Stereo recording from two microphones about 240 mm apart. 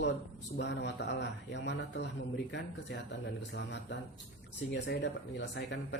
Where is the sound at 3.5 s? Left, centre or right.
Left.